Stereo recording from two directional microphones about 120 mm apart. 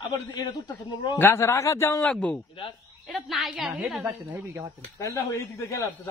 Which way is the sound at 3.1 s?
Centre (ahead or behind).